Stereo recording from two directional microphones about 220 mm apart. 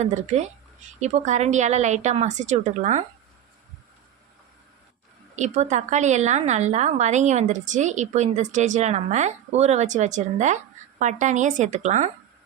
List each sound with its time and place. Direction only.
0.0 s a woman's voice: 30° right (ahead or behind)
5.4 s a woman's voice: 30° right (ahead or behind)